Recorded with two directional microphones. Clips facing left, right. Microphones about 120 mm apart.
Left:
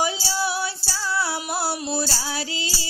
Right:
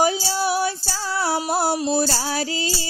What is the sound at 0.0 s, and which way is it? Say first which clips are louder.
Music: right 4 dB; 45° right (ahead or behind).